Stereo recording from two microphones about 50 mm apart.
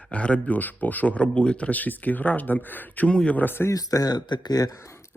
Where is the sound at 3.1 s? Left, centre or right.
Centre.